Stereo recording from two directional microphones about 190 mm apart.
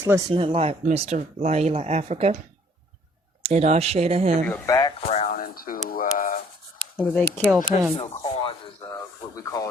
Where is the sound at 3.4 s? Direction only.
35° right (ahead or behind).